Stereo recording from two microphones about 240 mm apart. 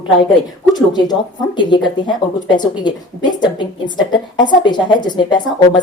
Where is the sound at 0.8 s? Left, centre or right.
Centre.